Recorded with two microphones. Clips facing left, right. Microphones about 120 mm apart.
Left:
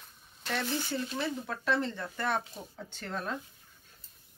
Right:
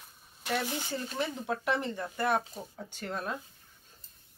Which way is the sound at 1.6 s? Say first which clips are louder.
Left 3 dB; 15° right (ahead or behind).